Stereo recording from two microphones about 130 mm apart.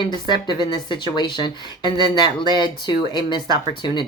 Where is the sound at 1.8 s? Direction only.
35° right (ahead or behind).